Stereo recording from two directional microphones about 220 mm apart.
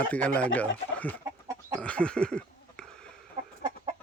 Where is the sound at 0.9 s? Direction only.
5° left (ahead or behind).